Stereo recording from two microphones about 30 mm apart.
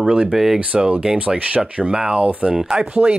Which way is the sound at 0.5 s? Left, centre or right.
Right.